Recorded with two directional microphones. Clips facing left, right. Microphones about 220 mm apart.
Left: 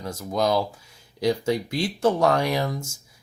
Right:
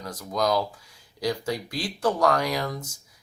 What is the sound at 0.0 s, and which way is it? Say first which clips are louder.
Speech: left 2 dB; 25° left (ahead or behind).